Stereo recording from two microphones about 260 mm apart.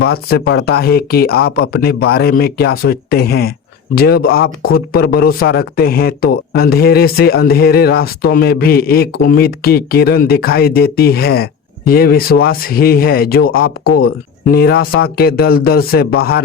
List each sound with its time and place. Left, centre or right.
0.0 s speech: left